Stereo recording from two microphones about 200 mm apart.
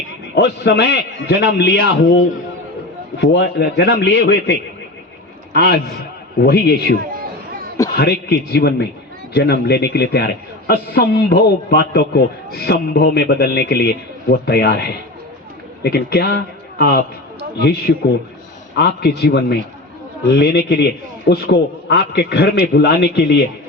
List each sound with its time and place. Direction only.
0.3 s a man's voice: 55° left (ahead or behind)
5.5 s a man's voice: 50° left (ahead or behind)
7.9 s a man's voice: 55° left (ahead or behind)